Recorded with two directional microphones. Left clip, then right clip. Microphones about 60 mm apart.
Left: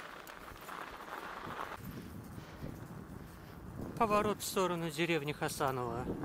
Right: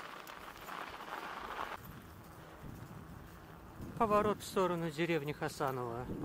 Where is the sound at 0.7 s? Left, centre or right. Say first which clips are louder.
Right 1 dB; right.